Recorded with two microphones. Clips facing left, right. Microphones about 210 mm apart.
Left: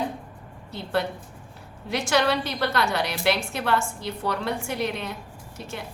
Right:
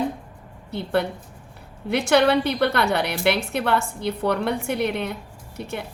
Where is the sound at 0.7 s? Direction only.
60° right (ahead or behind).